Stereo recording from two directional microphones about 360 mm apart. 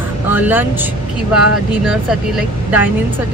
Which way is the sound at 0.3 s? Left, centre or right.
Centre.